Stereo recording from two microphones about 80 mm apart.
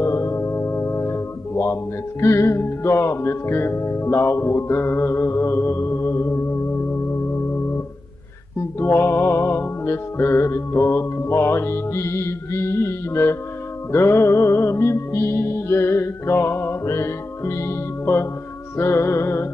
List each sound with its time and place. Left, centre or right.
0.0 s speech: left
8.7 s music: left